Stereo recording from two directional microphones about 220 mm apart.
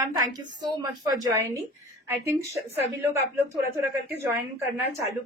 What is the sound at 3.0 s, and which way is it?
Speech, 10° right (ahead or behind).